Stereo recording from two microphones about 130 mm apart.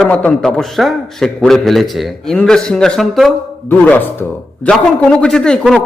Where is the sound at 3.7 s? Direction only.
15° left (ahead or behind).